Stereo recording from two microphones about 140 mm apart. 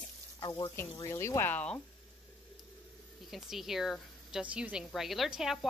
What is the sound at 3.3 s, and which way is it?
Speech, centre (ahead or behind).